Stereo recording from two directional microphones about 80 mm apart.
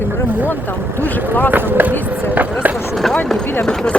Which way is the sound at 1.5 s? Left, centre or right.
Right.